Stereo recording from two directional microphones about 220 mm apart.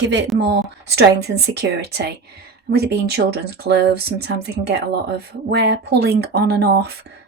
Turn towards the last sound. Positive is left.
turn(degrees=-50)  # may be behind; listen again after turning